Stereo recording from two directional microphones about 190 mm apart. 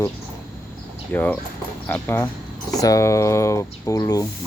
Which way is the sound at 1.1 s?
10° left (ahead or behind).